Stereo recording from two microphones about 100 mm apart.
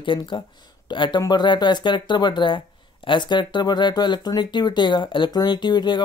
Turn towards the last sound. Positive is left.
turn(degrees=50)  # may be behind; listen again after turning